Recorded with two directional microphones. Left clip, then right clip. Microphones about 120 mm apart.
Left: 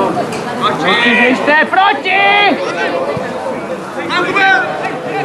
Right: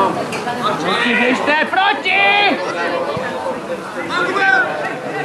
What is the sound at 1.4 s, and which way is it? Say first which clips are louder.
A man's voice: left 5 dB; 10° right (ahead or behind).